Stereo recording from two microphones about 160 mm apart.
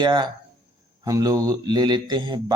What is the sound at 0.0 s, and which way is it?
Speech, 30° right (ahead or behind).